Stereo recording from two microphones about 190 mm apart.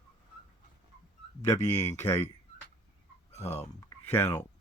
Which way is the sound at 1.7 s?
15° left (ahead or behind).